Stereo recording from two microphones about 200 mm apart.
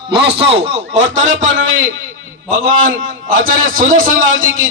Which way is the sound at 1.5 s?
80° right.